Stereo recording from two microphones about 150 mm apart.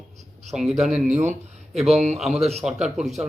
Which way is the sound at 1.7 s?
45° right (ahead or behind).